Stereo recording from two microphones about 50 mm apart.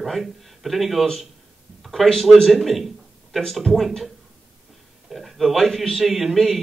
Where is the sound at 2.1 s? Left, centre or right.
Centre.